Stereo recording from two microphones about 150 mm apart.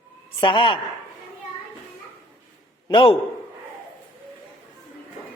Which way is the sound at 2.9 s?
35° left (ahead or behind).